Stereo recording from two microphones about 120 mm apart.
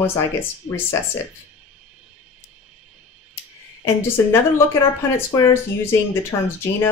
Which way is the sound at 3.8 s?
20° left (ahead or behind).